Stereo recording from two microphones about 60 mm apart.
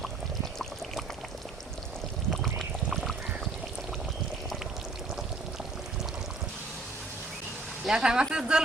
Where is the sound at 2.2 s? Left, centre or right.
Centre.